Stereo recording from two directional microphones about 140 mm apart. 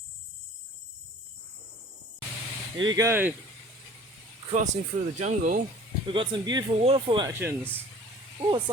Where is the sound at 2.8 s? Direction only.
25° right (ahead or behind).